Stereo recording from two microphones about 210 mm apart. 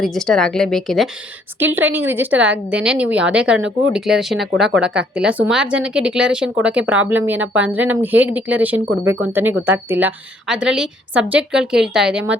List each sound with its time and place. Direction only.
0.0 s a woman's voice: centre (ahead or behind)
1.7 s a woman's voice: 10° right (ahead or behind)